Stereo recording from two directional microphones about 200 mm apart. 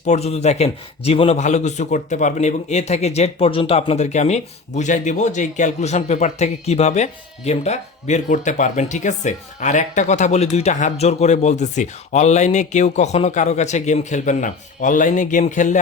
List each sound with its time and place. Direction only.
0.0 s a man's voice: 35° left (ahead or behind)